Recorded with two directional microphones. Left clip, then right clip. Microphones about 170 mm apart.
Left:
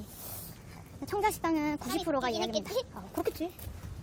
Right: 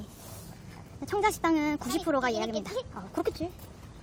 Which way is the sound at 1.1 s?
5° right (ahead or behind).